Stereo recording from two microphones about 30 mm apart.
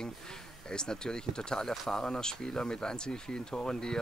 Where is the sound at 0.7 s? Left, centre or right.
Left.